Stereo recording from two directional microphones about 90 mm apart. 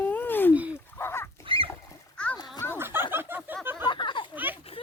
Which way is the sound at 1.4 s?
80° right.